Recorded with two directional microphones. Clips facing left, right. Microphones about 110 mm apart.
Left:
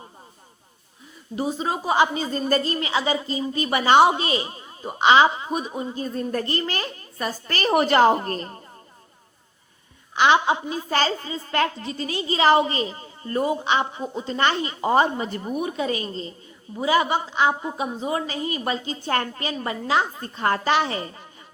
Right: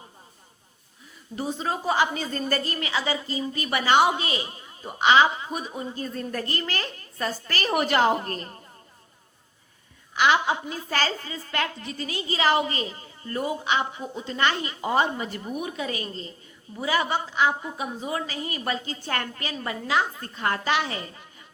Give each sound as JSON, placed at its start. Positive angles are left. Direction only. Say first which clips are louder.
{"t": 1.4, "sound": "a woman's voice", "louder": "left 3 dB", "side_deg": 15}
{"t": 7.4, "sound": "a woman's voice", "louder": "left 6 dB", "side_deg": 30}
{"t": 10.2, "sound": "a woman's voice", "louder": "left 3 dB", "side_deg": 25}
{"t": 11.5, "sound": "a woman's voice", "louder": "left 6 dB", "side_deg": 35}